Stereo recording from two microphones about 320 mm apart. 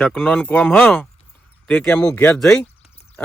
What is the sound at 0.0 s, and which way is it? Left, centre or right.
Speech, centre.